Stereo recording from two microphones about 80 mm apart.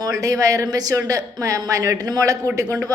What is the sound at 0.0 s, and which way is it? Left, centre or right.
A woman's voice, right.